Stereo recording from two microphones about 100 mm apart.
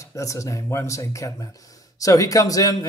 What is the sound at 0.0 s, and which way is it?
Speech, 30° left (ahead or behind).